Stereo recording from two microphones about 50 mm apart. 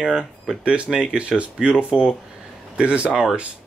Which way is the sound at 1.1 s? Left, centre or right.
Right.